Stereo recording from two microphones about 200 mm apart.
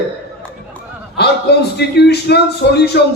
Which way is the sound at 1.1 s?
55° left (ahead or behind).